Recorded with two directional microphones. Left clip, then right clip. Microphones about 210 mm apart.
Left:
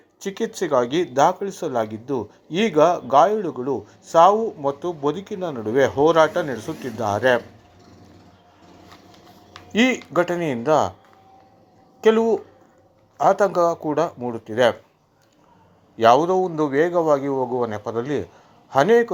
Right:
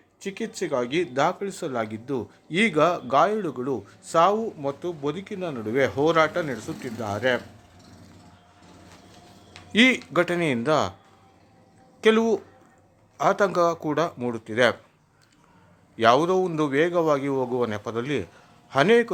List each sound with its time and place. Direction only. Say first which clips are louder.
0.2 s speech: left 5 dB; 10° left (ahead or behind)
1.1 s a man's voice: left 6 dB; 5° right (ahead or behind)
9.7 s a man's voice: even; 10° right (ahead or behind)
11.9 s a man's voice: left 3 dB; 10° right (ahead or behind)
16.0 s a man's voice: left 4 dB; 10° right (ahead or behind)